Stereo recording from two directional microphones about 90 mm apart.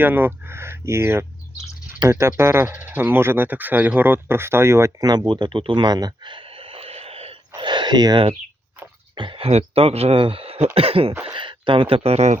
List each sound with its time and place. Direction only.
0.0 s speech: 20° right (ahead or behind)
4.9 s a sound: 50° right (ahead or behind)
9.1 s speech: 65° right (ahead or behind); by 10.6 s 90° right
10.8 s cough: 90° right
11.3 s speech: 65° right (ahead or behind); by 12.1 s 85° right